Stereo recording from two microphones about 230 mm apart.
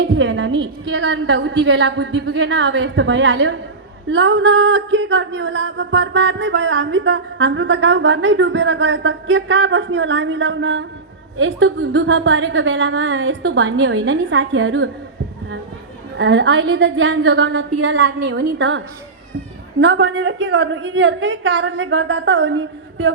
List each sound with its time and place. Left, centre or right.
0.0 s speech: right
16.1 s speech: right
19.8 s speech: right